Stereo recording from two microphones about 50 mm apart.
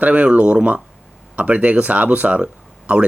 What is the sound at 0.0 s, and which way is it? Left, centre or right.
Speech, right.